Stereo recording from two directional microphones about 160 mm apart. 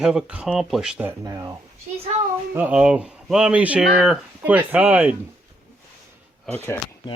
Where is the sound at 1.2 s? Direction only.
20° right (ahead or behind).